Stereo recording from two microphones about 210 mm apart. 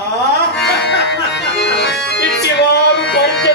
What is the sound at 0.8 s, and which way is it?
Music, 55° left (ahead or behind).